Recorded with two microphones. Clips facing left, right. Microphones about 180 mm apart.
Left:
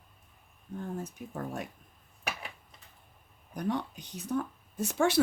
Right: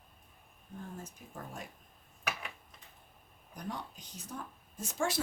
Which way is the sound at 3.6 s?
70° left (ahead or behind).